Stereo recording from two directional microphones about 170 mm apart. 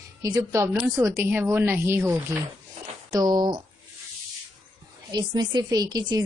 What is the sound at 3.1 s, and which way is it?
Speech, 25° right (ahead or behind).